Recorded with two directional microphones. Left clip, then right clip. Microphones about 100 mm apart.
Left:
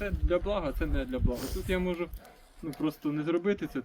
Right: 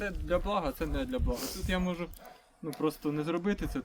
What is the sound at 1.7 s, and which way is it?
Speech, 40° right (ahead or behind).